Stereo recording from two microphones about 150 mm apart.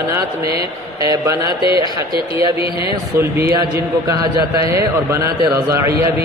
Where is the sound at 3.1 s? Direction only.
20° right (ahead or behind).